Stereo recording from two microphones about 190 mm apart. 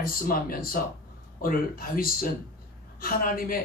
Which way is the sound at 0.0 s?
50° left (ahead or behind).